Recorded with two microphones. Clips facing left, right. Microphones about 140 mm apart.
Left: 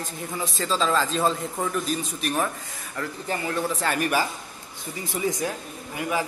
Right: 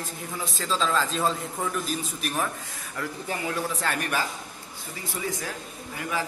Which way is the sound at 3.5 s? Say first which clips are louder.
Left 4 dB; centre (ahead or behind).